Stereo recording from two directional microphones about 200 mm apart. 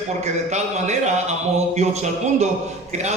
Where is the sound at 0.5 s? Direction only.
35° right (ahead or behind).